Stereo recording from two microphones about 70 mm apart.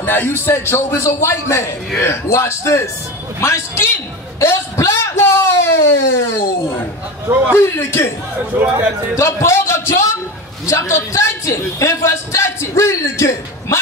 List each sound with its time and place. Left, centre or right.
0.0 s a man's voice: left
7.5 s a man's voice: left
8.5 s a man's voice: right
9.1 s a man's voice: left